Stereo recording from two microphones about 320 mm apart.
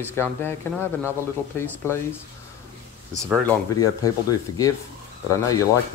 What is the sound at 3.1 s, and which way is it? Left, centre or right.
Speech, centre.